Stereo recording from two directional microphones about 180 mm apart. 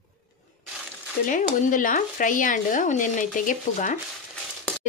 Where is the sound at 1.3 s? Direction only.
45° left (ahead or behind).